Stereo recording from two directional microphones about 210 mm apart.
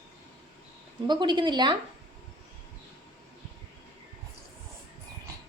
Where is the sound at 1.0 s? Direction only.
20° right (ahead or behind).